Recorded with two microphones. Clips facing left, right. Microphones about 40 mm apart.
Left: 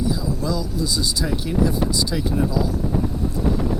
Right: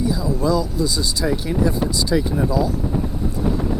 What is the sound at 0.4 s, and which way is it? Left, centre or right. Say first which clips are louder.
Speech: right 6 dB; centre.